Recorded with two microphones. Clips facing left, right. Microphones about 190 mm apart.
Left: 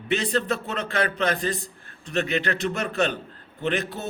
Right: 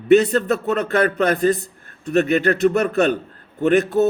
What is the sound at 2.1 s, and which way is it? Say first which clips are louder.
A man's voice: right 8 dB; 45° right (ahead or behind).